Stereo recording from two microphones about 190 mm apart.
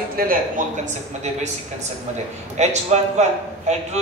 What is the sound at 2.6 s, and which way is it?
Speech, 35° right (ahead or behind).